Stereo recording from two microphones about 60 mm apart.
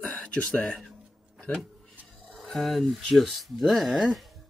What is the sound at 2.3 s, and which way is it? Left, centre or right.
Speech, centre.